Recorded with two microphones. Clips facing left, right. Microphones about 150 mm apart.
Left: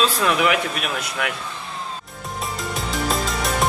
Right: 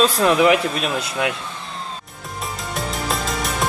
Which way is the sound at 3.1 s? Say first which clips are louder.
Left 2 dB; centre (ahead or behind).